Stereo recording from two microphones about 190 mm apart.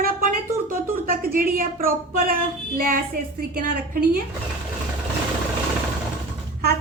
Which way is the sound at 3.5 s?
50° right (ahead or behind).